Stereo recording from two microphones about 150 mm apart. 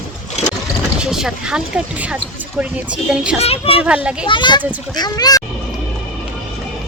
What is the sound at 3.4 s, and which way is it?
A child's voice, 40° left (ahead or behind).